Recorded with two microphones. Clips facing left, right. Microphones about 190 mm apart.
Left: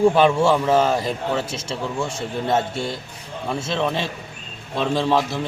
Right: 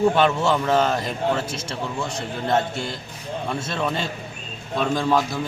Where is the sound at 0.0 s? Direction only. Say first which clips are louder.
Left 3 dB; 10° left (ahead or behind).